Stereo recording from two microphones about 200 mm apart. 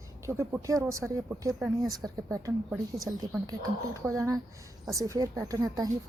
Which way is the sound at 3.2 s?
20° right (ahead or behind).